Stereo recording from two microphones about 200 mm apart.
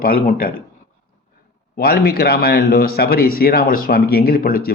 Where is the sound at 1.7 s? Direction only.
50° left (ahead or behind).